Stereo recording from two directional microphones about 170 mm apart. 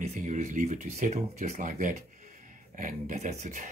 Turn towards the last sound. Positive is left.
turn(degrees=-45)  # may be behind; listen again after turning